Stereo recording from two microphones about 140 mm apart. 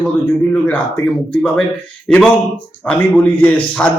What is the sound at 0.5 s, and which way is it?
A man's voice, 10° left (ahead or behind).